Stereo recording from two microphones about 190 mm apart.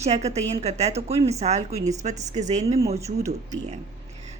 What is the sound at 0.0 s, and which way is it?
A woman's voice, 35° right (ahead or behind).